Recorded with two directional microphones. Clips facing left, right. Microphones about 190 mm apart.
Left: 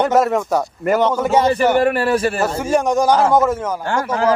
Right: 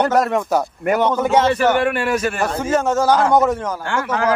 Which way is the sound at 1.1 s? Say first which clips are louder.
Even; 10° left (ahead or behind).